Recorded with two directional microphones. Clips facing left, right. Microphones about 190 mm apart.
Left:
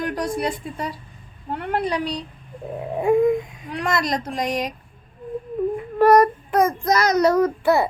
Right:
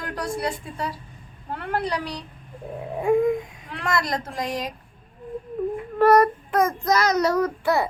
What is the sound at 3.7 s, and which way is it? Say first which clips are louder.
A woman's voice: left 3 dB; 20° left (ahead or behind).